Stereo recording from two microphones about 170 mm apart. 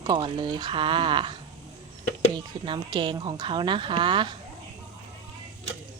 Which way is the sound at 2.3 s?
25° right (ahead or behind).